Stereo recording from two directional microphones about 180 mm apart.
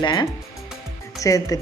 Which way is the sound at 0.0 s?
25° left (ahead or behind).